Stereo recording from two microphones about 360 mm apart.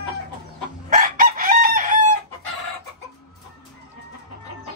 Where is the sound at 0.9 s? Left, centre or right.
Right.